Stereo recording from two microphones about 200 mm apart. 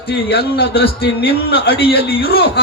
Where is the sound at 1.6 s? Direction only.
50° left (ahead or behind).